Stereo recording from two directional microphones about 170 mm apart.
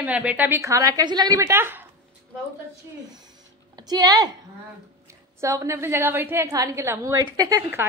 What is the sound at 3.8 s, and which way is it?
Speech, 25° right (ahead or behind).